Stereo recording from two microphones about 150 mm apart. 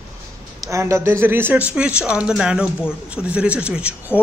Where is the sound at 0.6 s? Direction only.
20° right (ahead or behind).